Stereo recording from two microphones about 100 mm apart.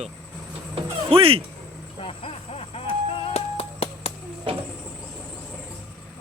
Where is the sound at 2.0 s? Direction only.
80° left.